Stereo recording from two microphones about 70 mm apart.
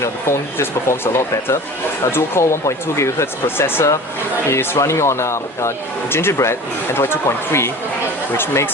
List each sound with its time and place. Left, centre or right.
0.0 s speech: left